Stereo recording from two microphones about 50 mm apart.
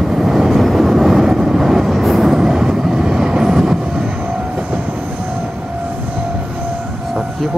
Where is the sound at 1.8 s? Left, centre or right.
Centre.